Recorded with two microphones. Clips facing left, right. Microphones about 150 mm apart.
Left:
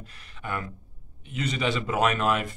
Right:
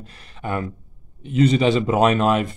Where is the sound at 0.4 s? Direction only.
30° right (ahead or behind).